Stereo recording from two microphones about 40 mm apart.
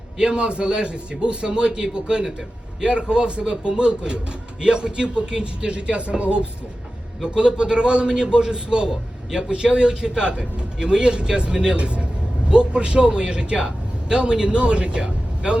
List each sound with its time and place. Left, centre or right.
0.2 s a man's voice: right
7.2 s a man's voice: centre